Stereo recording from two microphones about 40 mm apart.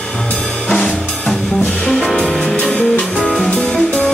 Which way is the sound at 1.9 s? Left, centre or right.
Centre.